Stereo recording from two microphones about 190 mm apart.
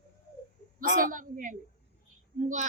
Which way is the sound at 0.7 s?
45° right (ahead or behind).